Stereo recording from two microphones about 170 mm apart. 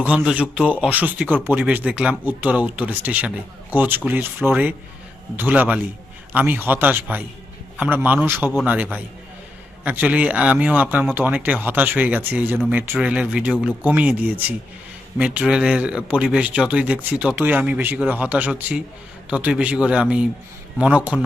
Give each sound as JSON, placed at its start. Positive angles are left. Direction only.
{"t": 0.0, "sound": "speech", "side_deg": -10}